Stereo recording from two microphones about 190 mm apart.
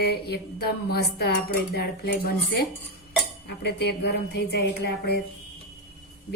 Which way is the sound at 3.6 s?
60° left (ahead or behind).